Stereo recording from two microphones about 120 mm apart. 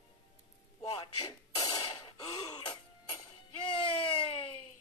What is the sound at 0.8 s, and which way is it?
Speech, 50° left (ahead or behind).